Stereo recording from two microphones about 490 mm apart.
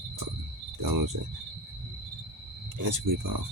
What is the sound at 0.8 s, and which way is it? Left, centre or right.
Cricket, right.